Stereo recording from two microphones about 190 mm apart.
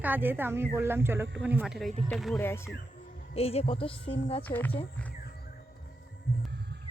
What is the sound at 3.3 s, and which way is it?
Speech, 30° left (ahead or behind).